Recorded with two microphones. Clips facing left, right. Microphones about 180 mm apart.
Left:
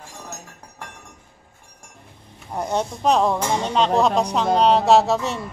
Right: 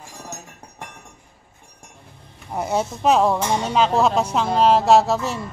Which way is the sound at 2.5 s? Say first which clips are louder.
Right 1 dB; 5° right (ahead or behind).